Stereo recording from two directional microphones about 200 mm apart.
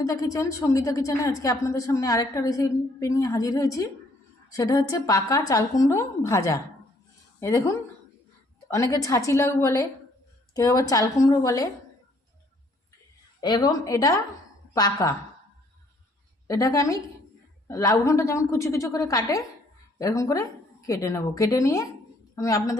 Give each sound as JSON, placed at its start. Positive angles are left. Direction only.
{"t": 0.0, "sound": "a woman's voice", "side_deg": 15}
{"t": 13.4, "sound": "a woman's voice", "side_deg": 20}
{"t": 16.5, "sound": "a woman's voice", "side_deg": 15}